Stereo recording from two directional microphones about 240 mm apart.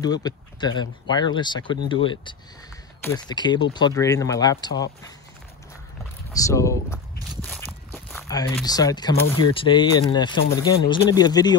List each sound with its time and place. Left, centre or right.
0.0 s speech: centre
6.4 s speech: centre
7.4 s walk: centre
8.6 s speech: centre